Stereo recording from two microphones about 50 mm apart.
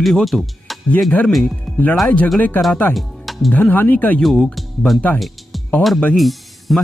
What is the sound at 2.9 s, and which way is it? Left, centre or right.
Music, centre.